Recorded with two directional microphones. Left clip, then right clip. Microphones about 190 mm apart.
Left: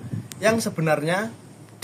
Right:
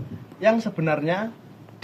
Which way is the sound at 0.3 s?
20° left (ahead or behind).